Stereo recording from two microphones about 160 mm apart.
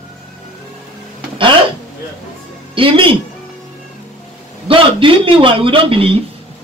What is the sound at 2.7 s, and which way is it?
Speech, 35° right (ahead or behind).